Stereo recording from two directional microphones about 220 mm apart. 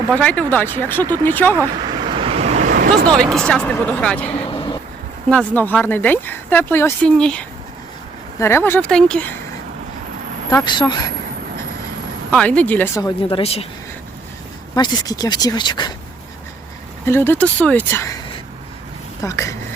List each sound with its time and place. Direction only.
0.1 s speech: 5° left (ahead or behind)
2.0 s vehicle: 25° right (ahead or behind); by 3.0 s 40° right (ahead or behind)
3.3 s speech: 5° left (ahead or behind)
4.3 s vehicle: 25° left (ahead or behind)
5.3 s speech: 5° left (ahead or behind)
10.5 s speech: 20° left (ahead or behind)
12.3 s speech: 5° left (ahead or behind); by 13.7 s 25° left (ahead or behind)
14.8 s speech: 20° left (ahead or behind)
17.1 s speech: 10° left (ahead or behind)
19.2 s speech: 15° left (ahead or behind)